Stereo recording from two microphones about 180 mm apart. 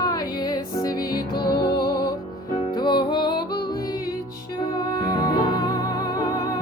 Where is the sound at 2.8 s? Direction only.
25° left (ahead or behind).